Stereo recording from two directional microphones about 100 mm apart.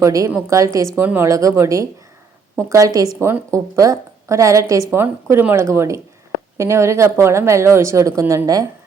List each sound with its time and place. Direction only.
0.0 s a woman's voice: 35° right (ahead or behind)
1.3 s a woman's voice: 35° right (ahead or behind)